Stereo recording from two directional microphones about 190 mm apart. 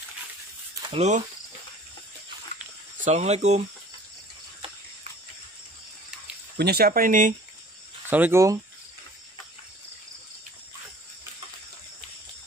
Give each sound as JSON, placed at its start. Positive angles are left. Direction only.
{"t": 0.8, "sound": "speech", "side_deg": -35}
{"t": 3.0, "sound": "speech", "side_deg": -35}
{"t": 6.6, "sound": "speech", "side_deg": -55}
{"t": 8.1, "sound": "speech", "side_deg": -10}